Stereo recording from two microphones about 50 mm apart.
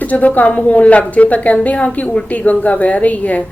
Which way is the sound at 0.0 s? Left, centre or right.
Left.